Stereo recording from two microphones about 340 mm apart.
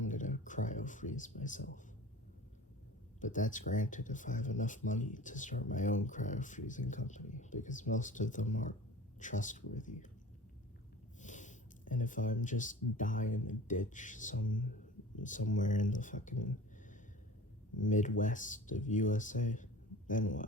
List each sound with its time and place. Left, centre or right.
0.0 s a sound: left
3.2 s speech: left
11.2 s speech: left
17.7 s speech: left